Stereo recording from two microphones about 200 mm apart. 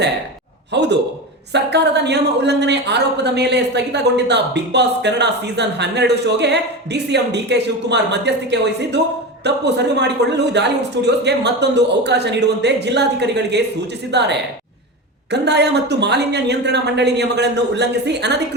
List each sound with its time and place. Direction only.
0.7 s a woman's voice: 60° right (ahead or behind)